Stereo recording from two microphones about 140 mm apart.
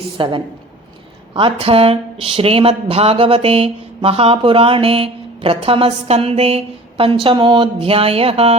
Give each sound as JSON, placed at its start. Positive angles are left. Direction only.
{"t": 0.2, "sound": "a woman's voice", "side_deg": -35}